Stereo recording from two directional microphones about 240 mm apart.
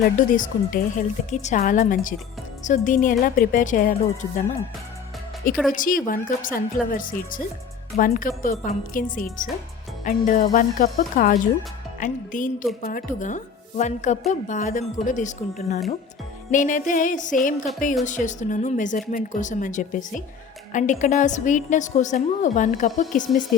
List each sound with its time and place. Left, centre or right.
0.2 s a woman's voice: left
5.7 s a woman's voice: left